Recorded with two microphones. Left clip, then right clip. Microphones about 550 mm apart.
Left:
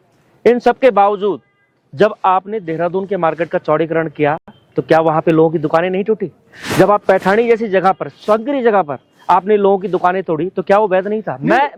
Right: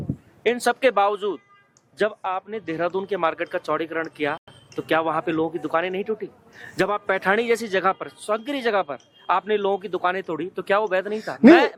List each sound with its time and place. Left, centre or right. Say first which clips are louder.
0.4 s speech: left 9 dB; left
2.6 s speech: left 7 dB; centre